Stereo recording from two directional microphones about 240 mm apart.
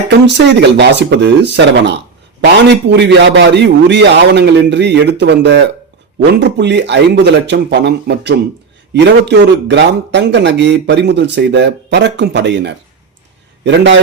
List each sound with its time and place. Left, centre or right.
0.3 s speech: right